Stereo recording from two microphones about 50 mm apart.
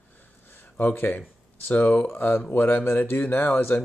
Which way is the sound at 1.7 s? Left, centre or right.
Left.